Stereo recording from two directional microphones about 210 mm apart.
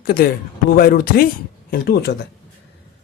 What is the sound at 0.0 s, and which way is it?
A man's voice, 45° left (ahead or behind).